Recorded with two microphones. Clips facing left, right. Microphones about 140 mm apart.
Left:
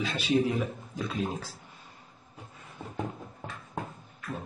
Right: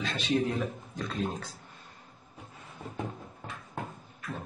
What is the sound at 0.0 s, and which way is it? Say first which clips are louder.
A man's voice: left 2 dB; 10° left (ahead or behind).